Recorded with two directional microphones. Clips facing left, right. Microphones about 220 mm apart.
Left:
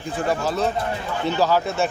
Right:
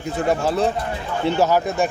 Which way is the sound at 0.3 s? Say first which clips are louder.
Right 3 dB; 25° right (ahead or behind).